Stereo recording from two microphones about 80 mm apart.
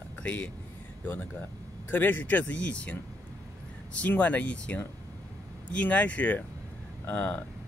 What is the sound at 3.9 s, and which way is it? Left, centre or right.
Speech, centre.